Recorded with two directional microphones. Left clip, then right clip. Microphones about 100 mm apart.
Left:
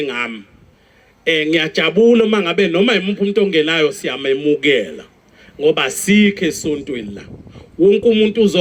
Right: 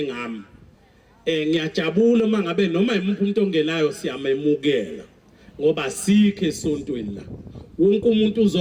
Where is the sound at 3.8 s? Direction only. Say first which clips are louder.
Left 6 dB; 40° right (ahead or behind).